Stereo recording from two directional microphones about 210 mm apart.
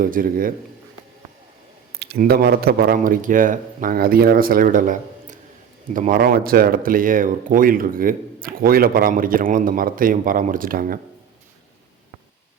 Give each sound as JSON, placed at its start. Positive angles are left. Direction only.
{"t": 0.0, "sound": "speech", "side_deg": -40}
{"t": 2.0, "sound": "speech", "side_deg": -50}